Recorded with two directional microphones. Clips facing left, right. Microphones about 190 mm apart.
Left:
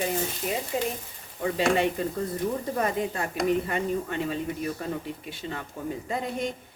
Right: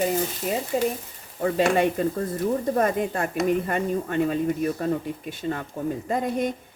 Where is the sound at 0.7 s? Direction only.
45° right (ahead or behind).